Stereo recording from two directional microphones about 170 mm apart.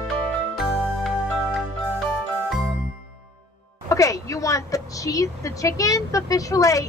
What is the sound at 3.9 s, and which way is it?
A woman's voice, 20° left (ahead or behind).